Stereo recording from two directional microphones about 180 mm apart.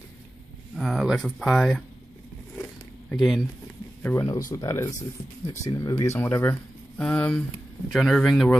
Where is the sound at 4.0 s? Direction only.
15° left (ahead or behind).